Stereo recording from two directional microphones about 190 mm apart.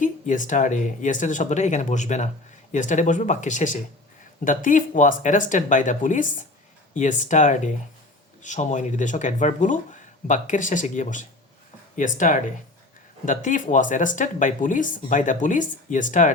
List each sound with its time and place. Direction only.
0.0 s speech: 45° left (ahead or behind)